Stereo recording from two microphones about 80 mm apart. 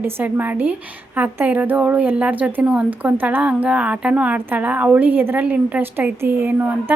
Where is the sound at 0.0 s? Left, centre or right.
Right.